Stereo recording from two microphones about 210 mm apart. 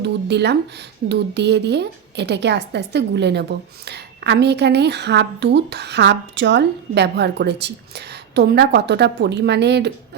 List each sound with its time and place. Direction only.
0.0 s a woman's voice: 55° right (ahead or behind)